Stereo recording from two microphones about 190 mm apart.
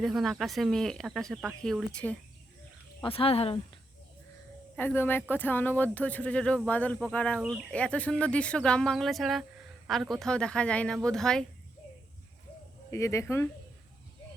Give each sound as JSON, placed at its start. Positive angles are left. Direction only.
{"t": 0.0, "sound": "speech", "side_deg": 0}
{"t": 3.0, "sound": "speech", "side_deg": 30}
{"t": 4.8, "sound": "speech", "side_deg": 10}
{"t": 12.9, "sound": "speech", "side_deg": 15}